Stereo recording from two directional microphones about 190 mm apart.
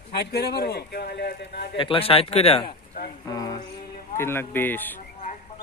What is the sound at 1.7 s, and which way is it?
Speech, 25° left (ahead or behind).